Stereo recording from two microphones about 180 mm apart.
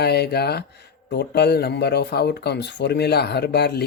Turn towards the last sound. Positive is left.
turn(degrees=65)  # may be behind; listen again after turning